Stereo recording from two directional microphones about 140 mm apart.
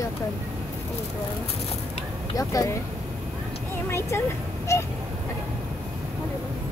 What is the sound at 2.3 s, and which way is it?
Speech, 25° left (ahead or behind).